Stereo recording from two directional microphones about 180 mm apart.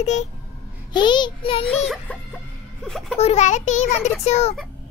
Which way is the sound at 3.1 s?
35° left (ahead or behind).